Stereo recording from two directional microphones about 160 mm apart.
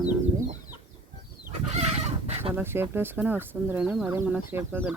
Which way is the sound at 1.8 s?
45° right (ahead or behind).